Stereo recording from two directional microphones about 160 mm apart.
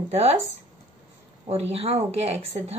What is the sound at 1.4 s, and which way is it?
Speech, 40° right (ahead or behind).